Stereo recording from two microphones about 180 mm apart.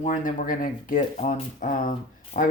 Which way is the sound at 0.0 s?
45° left (ahead or behind).